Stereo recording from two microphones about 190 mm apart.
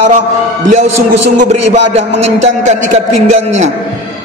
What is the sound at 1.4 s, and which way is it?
A man's voice, 35° right (ahead or behind).